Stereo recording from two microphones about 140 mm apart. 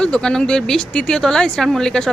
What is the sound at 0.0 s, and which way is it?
Speech, 5° left (ahead or behind).